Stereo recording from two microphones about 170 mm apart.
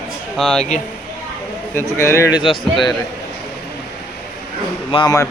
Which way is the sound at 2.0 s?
15° left (ahead or behind).